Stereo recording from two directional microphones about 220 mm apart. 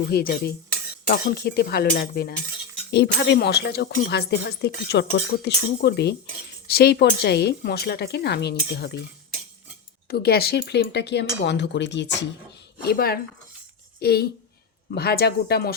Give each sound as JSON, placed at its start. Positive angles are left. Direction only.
{"t": 0.1, "sound": "speech", "side_deg": 45}
{"t": 10.1, "sound": "speech", "side_deg": 45}